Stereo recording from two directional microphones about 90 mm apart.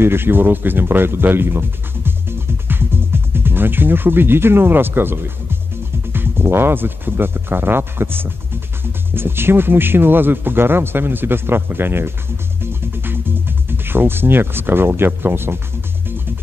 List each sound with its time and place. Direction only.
0.0 s speech: 25° right (ahead or behind)
2.0 s music: 25° right (ahead or behind)
6.1 s speech: 25° right (ahead or behind)
12.9 s music: 25° right (ahead or behind)